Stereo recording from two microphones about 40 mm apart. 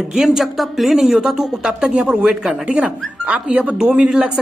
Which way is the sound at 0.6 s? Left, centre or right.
Centre.